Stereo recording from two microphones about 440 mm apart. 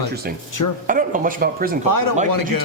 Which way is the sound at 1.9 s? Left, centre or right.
Left.